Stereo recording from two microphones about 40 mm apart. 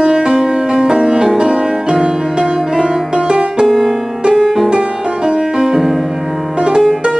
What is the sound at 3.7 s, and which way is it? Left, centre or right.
Music, centre.